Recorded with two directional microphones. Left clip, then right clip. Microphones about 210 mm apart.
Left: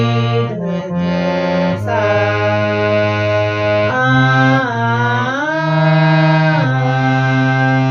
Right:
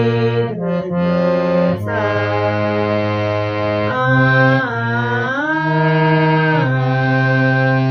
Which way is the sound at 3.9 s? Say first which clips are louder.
Left 1 dB; centre (ahead or behind).